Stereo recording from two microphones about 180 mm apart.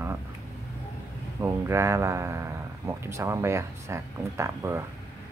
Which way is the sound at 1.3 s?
15° right (ahead or behind).